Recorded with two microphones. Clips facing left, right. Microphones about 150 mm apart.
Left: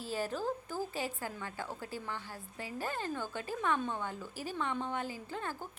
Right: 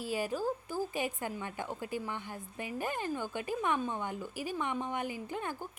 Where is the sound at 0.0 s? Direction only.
10° right (ahead or behind).